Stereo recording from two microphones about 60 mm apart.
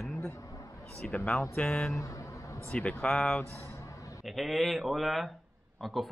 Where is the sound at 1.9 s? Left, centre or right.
Left.